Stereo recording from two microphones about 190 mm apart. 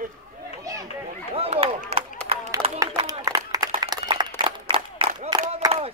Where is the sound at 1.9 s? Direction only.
35° right (ahead or behind).